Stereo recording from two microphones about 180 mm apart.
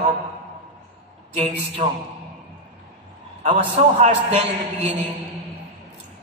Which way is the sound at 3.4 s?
35° right (ahead or behind).